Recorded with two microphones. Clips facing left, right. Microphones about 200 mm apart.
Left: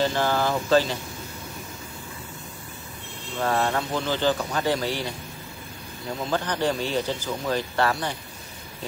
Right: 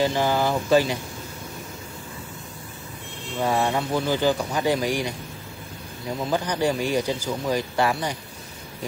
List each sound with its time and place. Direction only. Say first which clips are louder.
0.0 s speech: right 2 dB; 10° right (ahead or behind)
3.3 s speech: right 1 dB; 10° right (ahead or behind)
6.3 s speech: right 2 dB; 10° right (ahead or behind)